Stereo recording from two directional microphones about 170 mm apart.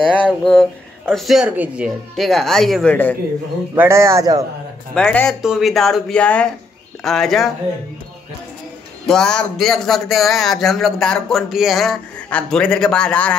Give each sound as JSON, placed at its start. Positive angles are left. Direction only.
{"t": 0.0, "sound": "speech", "side_deg": 5}
{"t": 3.7, "sound": "a man's voice", "side_deg": -15}
{"t": 4.9, "sound": "speech", "side_deg": 5}
{"t": 9.0, "sound": "speech", "side_deg": 5}